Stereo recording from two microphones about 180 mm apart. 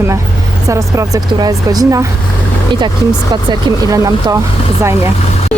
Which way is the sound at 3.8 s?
20° right (ahead or behind).